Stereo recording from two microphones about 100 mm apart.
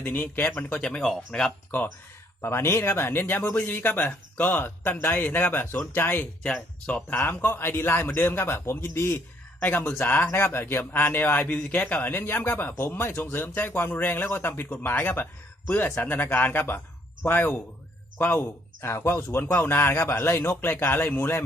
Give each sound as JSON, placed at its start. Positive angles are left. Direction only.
{"t": 0.0, "sound": "a man's voice", "side_deg": 20}
{"t": 0.8, "sound": "speech", "side_deg": 10}
{"t": 2.4, "sound": "a man's voice", "side_deg": 25}
{"t": 6.5, "sound": "speech", "side_deg": 10}
{"t": 7.1, "sound": "a man's voice", "side_deg": 20}